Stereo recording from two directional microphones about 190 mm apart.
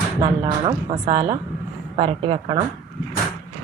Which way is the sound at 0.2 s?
25° right (ahead or behind).